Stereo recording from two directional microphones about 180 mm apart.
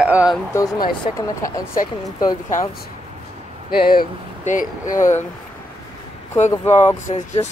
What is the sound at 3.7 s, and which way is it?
Speech, 55° left (ahead or behind).